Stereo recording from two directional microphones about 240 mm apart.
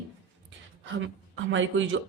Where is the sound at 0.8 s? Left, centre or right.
Right.